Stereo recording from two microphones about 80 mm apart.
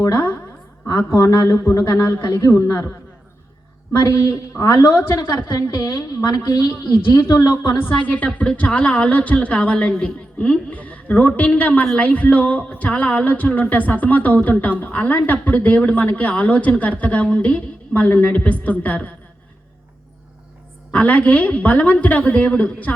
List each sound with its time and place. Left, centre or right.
0.0 s a man's voice: left
3.9 s a man's voice: left
7.9 s a woman's voice: centre
20.9 s a woman's voice: centre